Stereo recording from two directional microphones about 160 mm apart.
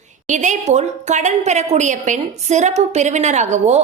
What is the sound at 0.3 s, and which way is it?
A woman's voice, 50° right (ahead or behind).